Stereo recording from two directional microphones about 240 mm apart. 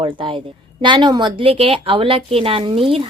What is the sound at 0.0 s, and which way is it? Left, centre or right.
A woman's voice, right.